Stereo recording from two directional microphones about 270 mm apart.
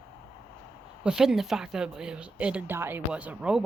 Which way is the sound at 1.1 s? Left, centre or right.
Centre.